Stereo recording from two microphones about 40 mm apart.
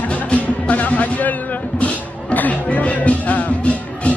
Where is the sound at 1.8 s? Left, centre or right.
Left.